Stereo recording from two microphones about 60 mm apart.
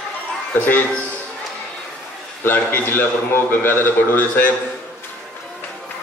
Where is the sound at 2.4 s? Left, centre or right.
Left.